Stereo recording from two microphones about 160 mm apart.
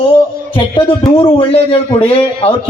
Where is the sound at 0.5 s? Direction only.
30° left (ahead or behind).